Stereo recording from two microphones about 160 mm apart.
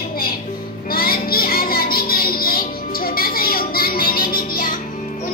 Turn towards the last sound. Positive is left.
turn(degrees=65)  # may be behind; listen again after turning